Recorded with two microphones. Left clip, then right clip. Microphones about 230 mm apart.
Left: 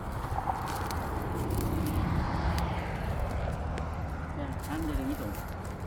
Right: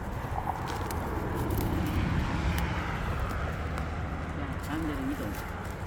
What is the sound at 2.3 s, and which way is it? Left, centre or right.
Vehicle, right.